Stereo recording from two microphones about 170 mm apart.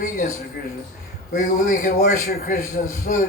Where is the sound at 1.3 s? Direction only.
50° left (ahead or behind).